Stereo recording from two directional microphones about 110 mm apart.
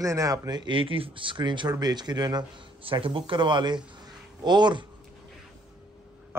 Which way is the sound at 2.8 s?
55° right (ahead or behind).